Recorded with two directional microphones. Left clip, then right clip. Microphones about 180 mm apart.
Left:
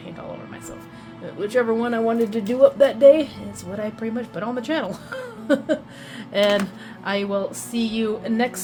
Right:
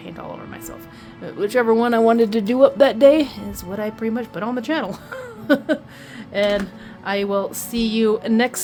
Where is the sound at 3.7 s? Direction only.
40° right (ahead or behind).